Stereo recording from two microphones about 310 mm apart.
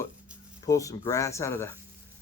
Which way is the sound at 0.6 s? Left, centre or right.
Centre.